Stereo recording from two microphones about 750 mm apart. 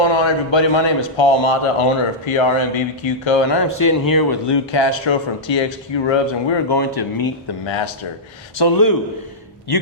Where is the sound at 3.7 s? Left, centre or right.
Left.